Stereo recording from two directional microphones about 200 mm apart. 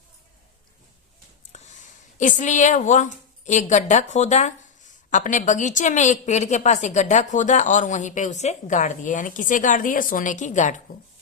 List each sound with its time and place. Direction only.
2.1 s a woman's voice: 40° left (ahead or behind)